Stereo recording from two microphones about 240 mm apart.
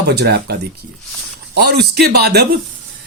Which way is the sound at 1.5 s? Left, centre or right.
Right.